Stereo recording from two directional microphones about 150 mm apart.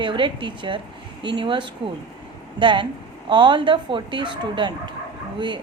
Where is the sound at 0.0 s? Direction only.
30° right (ahead or behind).